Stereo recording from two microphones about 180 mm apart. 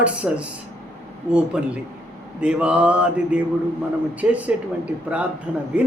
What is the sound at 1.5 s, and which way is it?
Speech, 5° right (ahead or behind).